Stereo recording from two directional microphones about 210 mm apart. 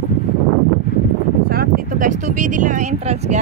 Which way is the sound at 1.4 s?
45° right (ahead or behind).